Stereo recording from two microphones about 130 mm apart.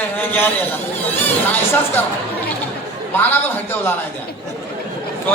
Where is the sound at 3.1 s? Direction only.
15° left (ahead or behind).